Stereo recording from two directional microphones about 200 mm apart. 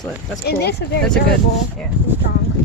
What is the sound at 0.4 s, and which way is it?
Speech, 55° left (ahead or behind).